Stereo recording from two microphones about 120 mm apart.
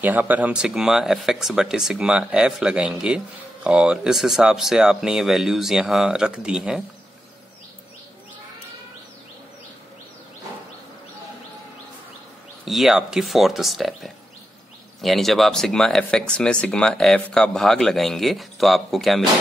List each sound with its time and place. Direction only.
0.0 s speech: 15° right (ahead or behind)
12.6 s speech: centre (ahead or behind)